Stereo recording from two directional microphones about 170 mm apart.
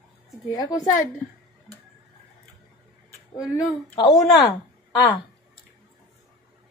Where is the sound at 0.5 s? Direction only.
20° left (ahead or behind).